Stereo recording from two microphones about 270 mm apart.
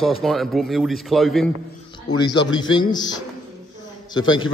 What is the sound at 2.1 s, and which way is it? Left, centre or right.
A man's voice, centre.